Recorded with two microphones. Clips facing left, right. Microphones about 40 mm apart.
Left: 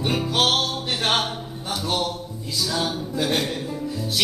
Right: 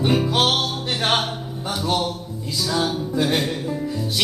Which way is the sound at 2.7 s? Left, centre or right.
Centre.